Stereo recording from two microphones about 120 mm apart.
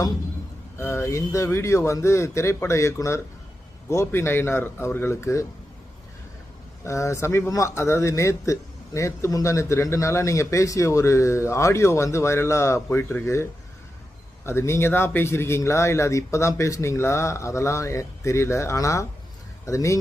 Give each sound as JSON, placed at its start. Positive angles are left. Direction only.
{"t": 0.8, "sound": "speech", "side_deg": 20}
{"t": 6.8, "sound": "speech", "side_deg": 25}